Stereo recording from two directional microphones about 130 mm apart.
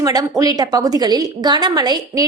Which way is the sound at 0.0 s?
30° right (ahead or behind).